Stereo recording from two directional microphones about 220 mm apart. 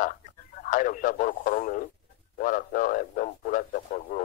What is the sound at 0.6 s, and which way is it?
Speech, 35° left (ahead or behind).